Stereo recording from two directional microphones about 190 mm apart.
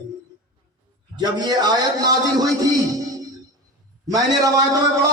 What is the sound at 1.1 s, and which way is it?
A man's voice, 20° right (ahead or behind).